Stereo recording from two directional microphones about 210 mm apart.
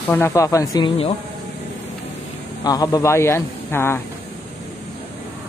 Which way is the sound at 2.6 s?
15° left (ahead or behind).